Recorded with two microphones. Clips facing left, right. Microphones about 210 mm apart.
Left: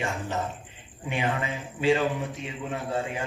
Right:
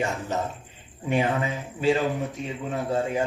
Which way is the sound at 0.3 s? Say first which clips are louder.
Right 2 dB; 40° right (ahead or behind).